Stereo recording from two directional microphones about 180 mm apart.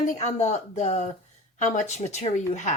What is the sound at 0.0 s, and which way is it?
Speech, 40° left (ahead or behind).